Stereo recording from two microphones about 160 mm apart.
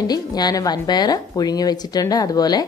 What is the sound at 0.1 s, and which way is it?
A woman's voice, 25° left (ahead or behind).